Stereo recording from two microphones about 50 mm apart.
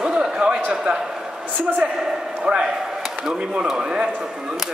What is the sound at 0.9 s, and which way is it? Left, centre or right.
Speech, centre.